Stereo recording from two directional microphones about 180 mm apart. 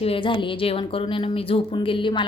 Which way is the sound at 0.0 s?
30° left (ahead or behind).